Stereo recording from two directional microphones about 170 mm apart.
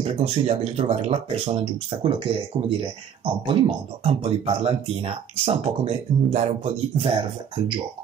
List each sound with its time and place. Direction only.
0.0 s speech: 35° right (ahead or behind)
3.4 s speech: 35° right (ahead or behind)